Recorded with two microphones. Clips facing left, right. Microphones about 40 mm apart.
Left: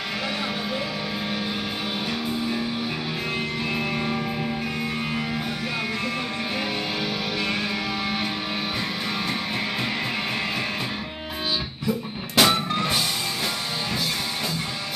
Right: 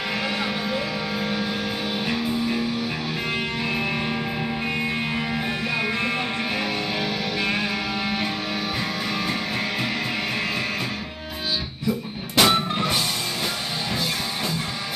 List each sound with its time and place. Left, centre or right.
3.7 s music: centre
5.1 s music: right
12.4 s music: centre